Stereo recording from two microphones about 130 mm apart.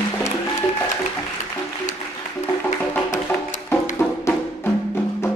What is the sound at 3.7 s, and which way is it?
Music, 15° left (ahead or behind).